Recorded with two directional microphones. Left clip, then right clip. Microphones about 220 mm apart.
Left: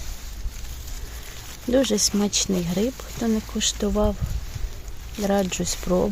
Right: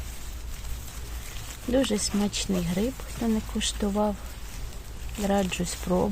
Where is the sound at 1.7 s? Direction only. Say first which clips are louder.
Left 5 dB; 30° left (ahead or behind).